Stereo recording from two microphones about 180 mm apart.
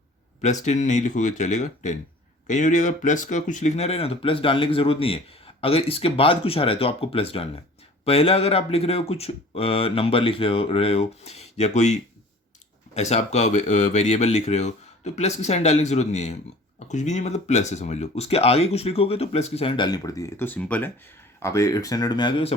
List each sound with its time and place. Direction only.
0.4 s speech: 40° left (ahead or behind)